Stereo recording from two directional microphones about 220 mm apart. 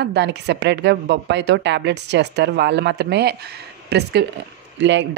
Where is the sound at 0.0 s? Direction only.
50° right (ahead or behind).